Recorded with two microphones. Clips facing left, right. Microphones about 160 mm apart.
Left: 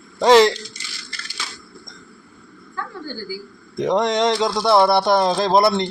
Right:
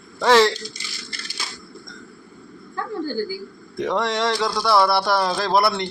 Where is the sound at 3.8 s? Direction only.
20° left (ahead or behind).